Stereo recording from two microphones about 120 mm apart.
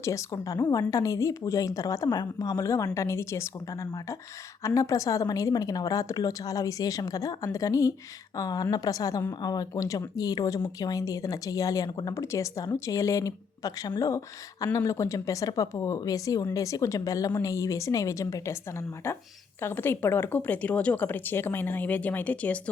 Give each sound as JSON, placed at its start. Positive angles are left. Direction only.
{"t": 0.0, "sound": "a woman's voice", "side_deg": 25}